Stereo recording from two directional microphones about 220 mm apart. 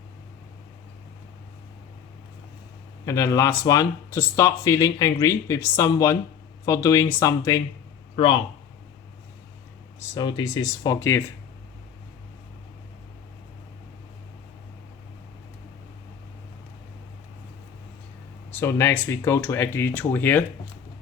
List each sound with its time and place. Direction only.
3.1 s speech: 15° left (ahead or behind)
10.2 s speech: 20° left (ahead or behind)
18.6 s speech: 10° left (ahead or behind)